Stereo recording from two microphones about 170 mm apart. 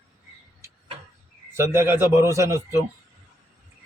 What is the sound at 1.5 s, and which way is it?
A man's voice, 15° right (ahead or behind).